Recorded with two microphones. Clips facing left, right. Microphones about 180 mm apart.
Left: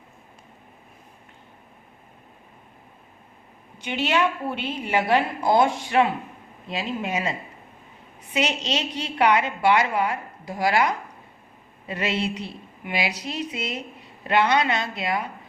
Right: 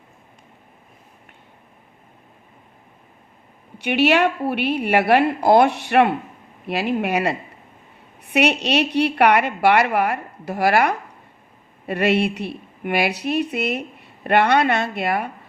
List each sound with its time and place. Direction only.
3.8 s a woman's voice: 65° right (ahead or behind)